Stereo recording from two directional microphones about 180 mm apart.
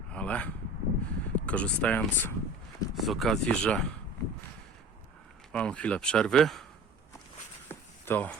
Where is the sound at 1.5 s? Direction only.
5° left (ahead or behind).